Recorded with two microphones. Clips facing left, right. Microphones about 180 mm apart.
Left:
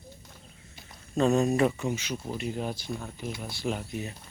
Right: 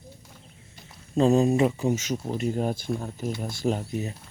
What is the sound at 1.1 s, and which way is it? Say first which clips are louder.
Speech: right 4 dB; 30° right (ahead or behind).